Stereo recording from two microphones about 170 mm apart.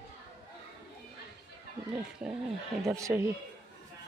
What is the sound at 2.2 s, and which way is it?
Speech, 5° right (ahead or behind).